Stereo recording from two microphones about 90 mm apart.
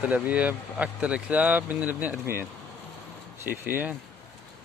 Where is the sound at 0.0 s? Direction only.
15° right (ahead or behind).